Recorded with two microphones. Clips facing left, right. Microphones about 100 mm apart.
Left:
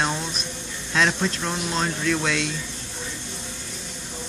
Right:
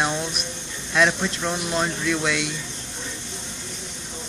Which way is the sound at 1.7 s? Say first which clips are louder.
Left 1 dB; 10° right (ahead or behind).